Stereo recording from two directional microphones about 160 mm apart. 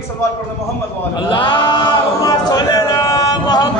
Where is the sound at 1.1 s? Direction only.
30° left (ahead or behind).